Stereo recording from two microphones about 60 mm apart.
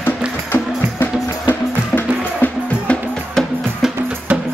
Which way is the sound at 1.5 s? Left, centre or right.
Left.